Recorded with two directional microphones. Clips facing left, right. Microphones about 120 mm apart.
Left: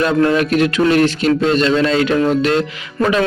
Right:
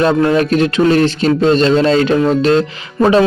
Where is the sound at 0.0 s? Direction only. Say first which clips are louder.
Right 2 dB; 30° right (ahead or behind).